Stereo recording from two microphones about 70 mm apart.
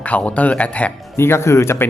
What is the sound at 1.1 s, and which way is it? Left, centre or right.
Speech, left.